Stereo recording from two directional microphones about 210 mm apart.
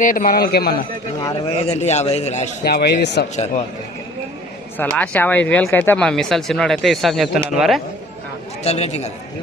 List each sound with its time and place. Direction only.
0.0 s a man's voice: 40° left (ahead or behind)
1.7 s a man's voice: 30° left (ahead or behind)
2.6 s a man's voice: 50° left (ahead or behind)
4.7 s speech: 5° left (ahead or behind)
8.6 s a man's voice: 30° left (ahead or behind)